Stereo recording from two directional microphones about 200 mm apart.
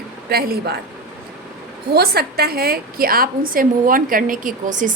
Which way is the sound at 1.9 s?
50° right (ahead or behind).